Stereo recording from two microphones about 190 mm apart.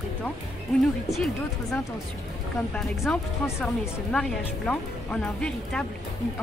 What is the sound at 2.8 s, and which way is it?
Speech, 5° left (ahead or behind).